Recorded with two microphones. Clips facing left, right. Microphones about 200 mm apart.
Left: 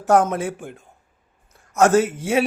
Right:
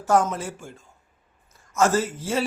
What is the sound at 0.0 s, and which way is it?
A man's voice, 60° left (ahead or behind).